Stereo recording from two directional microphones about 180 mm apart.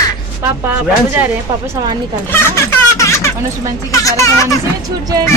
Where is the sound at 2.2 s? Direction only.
10° left (ahead or behind).